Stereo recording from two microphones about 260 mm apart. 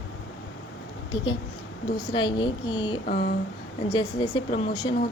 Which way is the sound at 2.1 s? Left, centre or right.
Centre.